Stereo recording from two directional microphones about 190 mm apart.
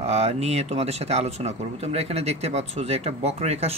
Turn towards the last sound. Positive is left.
turn(degrees=-35)  # may be behind; listen again after turning